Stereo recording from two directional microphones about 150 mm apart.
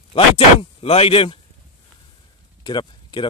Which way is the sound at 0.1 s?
40° left (ahead or behind).